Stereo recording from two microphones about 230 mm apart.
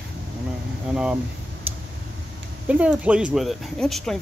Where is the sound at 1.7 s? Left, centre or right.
Centre.